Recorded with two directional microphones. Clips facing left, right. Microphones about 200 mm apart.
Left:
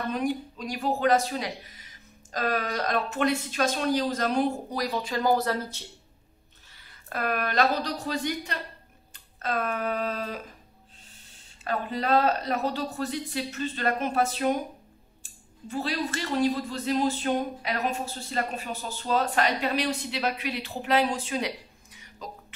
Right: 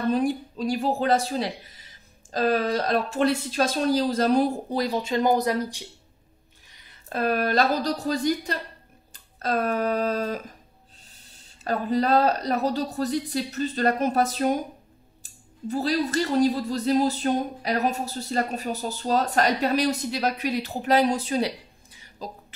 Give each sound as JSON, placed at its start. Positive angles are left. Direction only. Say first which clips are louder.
{"t": 0.1, "sound": "a woman's voice", "louder": "right 5 dB", "side_deg": -30}
{"t": 9.1, "sound": "a sound", "louder": "right 4 dB", "side_deg": -35}
{"t": 11.6, "sound": "speech", "louder": "right 5 dB", "side_deg": -40}
{"t": 15.7, "sound": "speech", "louder": "right 6 dB", "side_deg": -40}